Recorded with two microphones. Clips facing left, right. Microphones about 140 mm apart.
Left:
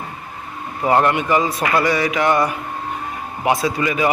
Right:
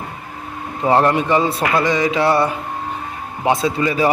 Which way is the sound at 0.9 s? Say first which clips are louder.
Right 1 dB; 30° right (ahead or behind).